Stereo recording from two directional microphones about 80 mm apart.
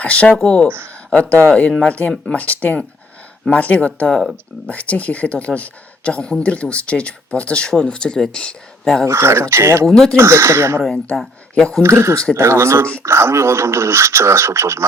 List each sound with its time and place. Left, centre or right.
0.0 s speech: centre
9.0 s speech: right
9.8 s speech: centre
10.2 s speech: right
10.8 s speech: centre
11.8 s speech: right